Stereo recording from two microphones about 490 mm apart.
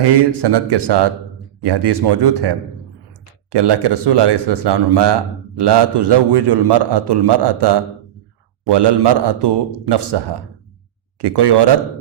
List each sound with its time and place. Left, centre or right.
0.0 s speech: right